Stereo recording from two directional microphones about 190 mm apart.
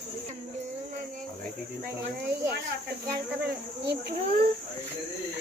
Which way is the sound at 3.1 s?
60° right (ahead or behind).